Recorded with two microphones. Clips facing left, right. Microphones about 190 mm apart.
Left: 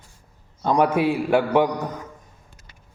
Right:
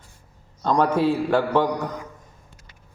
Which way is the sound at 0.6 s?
15° left (ahead or behind).